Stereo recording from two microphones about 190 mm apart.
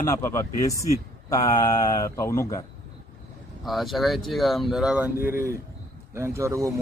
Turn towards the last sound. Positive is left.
turn(degrees=-15)  # may be behind; listen again after turning